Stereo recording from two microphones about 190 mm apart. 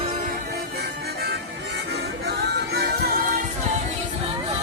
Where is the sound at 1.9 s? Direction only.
60° right (ahead or behind).